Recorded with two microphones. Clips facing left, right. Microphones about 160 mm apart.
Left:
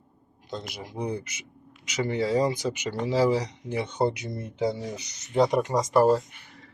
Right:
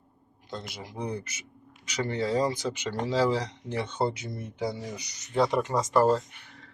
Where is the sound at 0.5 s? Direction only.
15° left (ahead or behind).